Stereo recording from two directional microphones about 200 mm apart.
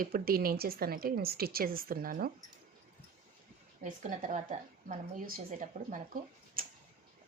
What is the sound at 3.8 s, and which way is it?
A woman's voice, 40° right (ahead or behind).